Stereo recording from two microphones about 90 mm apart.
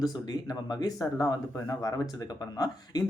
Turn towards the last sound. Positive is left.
turn(degrees=45)  # may be behind; listen again after turning